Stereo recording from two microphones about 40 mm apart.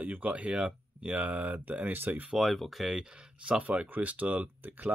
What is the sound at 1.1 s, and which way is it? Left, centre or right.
Speech, right.